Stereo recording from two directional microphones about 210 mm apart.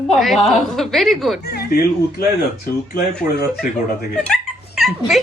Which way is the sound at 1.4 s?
45° left (ahead or behind).